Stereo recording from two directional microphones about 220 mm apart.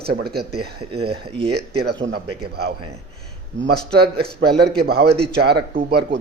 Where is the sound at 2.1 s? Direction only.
45° right (ahead or behind).